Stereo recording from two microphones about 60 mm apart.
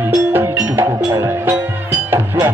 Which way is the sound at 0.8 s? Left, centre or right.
Right.